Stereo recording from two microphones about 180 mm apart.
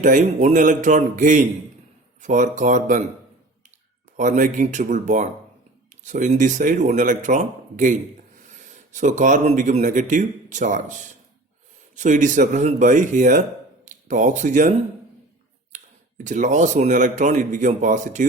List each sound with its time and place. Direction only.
0.0 s speech: 45° right (ahead or behind)
4.2 s speech: 45° right (ahead or behind)
11.9 s speech: 45° right (ahead or behind)
15.7 s speech: 45° right (ahead or behind)